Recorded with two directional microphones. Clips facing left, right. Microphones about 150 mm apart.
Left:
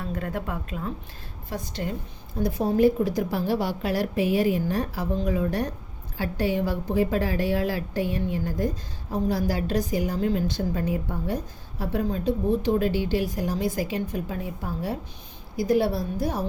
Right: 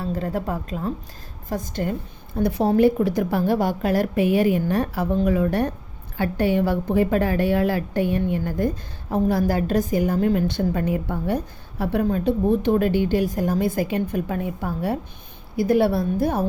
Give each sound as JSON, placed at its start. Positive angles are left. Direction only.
{"t": 0.0, "sound": "a woman's voice", "side_deg": -30}
{"t": 1.5, "sound": "a woman's voice", "side_deg": -45}
{"t": 2.4, "sound": "a woman's voice", "side_deg": -70}